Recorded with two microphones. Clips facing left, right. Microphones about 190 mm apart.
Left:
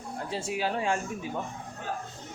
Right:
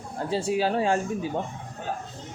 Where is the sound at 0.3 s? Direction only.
30° right (ahead or behind).